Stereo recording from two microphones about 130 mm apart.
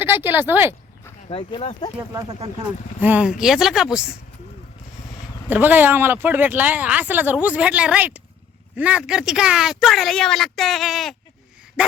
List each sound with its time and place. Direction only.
0.0 s speech: 15° right (ahead or behind)
1.3 s speech: 40° left (ahead or behind)
3.0 s speech: 10° right (ahead or behind)
5.5 s speech: 15° right (ahead or behind)